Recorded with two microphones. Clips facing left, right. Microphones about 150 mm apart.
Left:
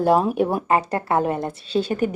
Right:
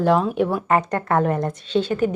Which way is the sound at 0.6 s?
30° left (ahead or behind).